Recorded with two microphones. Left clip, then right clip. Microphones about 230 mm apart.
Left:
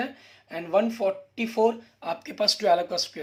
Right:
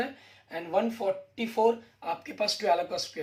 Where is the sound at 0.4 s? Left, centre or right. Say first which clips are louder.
Left 4 dB; left.